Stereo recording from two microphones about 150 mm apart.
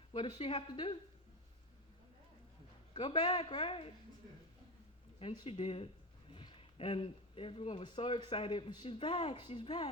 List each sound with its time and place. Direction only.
0.1 s speech: 35° left (ahead or behind)
2.9 s speech: 35° left (ahead or behind)
5.2 s speech: 35° left (ahead or behind)